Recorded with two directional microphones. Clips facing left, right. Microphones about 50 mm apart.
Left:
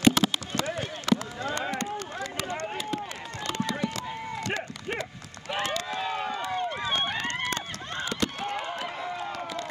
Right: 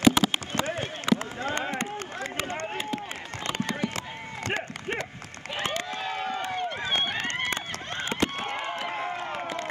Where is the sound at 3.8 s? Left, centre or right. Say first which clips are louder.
Even; right.